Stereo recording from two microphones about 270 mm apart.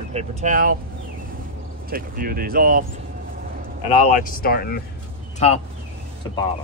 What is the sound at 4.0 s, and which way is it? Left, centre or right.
Speech, left.